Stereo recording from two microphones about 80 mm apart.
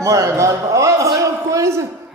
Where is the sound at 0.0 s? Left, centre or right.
Right.